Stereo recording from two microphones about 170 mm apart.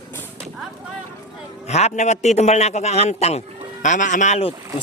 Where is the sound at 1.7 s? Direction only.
40° left (ahead or behind).